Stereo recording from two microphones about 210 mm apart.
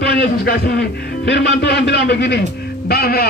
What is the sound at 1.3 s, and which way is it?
A man's voice, 50° left (ahead or behind).